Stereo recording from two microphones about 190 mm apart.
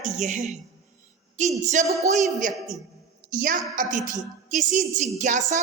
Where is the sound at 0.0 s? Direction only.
40° right (ahead or behind).